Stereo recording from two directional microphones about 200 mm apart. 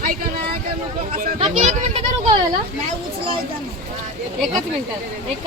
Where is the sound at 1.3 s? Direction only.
35° right (ahead or behind).